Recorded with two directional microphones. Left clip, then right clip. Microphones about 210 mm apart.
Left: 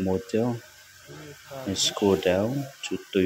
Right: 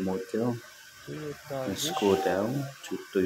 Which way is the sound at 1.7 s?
20° left (ahead or behind).